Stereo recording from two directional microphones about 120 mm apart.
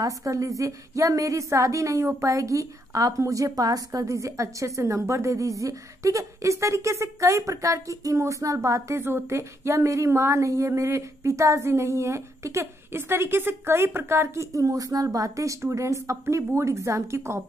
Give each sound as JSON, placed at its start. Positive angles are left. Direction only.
{"t": 0.0, "sound": "a woman's voice", "side_deg": -30}